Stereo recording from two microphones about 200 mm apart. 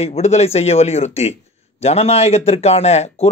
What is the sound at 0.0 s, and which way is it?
A man's voice, 35° left (ahead or behind).